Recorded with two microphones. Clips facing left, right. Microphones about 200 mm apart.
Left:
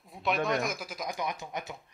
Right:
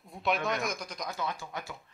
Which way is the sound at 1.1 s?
15° left (ahead or behind).